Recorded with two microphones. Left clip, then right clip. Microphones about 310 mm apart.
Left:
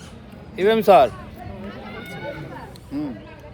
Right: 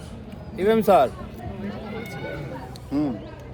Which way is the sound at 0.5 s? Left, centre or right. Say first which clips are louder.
Left 4 dB; left.